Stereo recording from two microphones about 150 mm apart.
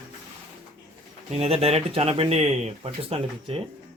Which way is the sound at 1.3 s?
45° right (ahead or behind).